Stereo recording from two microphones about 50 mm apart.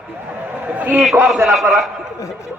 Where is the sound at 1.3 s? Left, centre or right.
Centre.